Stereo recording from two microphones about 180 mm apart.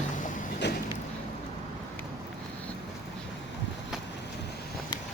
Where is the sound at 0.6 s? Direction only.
70° left (ahead or behind).